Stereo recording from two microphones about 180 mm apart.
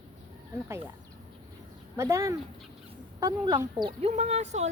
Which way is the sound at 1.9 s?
15° right (ahead or behind).